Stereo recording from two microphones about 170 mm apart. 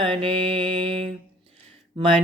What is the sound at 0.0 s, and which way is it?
Music, 30° right (ahead or behind).